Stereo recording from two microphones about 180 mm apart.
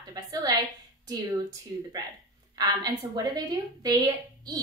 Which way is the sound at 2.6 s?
20° right (ahead or behind).